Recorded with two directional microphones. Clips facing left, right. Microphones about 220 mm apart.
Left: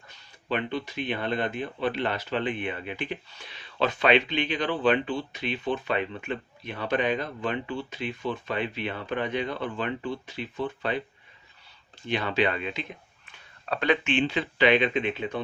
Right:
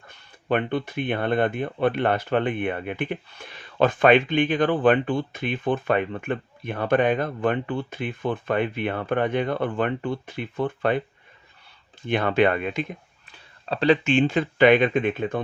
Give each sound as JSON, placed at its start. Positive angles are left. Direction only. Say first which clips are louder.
{"t": 0.1, "sound": "speech", "louder": "right 6 dB", "side_deg": -55}
{"t": 12.0, "sound": "speech", "louder": "right 6 dB", "side_deg": -55}
{"t": 13.7, "sound": "speech", "louder": "right 5 dB", "side_deg": -30}